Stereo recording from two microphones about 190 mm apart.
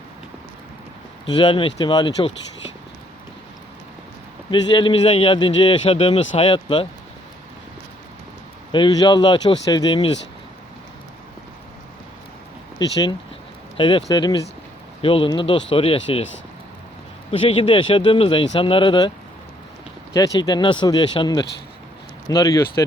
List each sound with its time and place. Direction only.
1.2 s a man's voice: 25° left (ahead or behind)
4.7 s a man's voice: 25° left (ahead or behind)
8.7 s a man's voice: 25° left (ahead or behind)
12.8 s a man's voice: 20° left (ahead or behind)
17.3 s a man's voice: 30° left (ahead or behind)
20.1 s a man's voice: 20° left (ahead or behind)